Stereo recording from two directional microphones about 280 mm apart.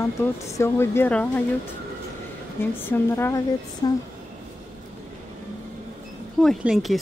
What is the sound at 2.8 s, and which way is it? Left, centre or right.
Speech, centre.